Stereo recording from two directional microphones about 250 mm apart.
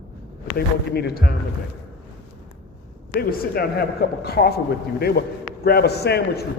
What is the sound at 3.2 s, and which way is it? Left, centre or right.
A man's voice, left.